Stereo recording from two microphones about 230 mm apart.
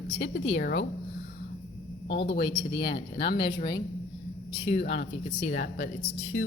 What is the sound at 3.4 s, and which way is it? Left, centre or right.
Speech, centre.